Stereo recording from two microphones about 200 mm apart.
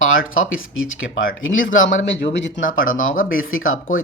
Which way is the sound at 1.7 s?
70° left (ahead or behind).